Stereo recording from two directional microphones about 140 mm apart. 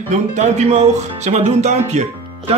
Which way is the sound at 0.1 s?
55° right (ahead or behind).